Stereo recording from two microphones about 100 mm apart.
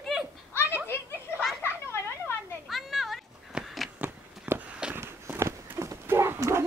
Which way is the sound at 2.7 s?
Centre (ahead or behind).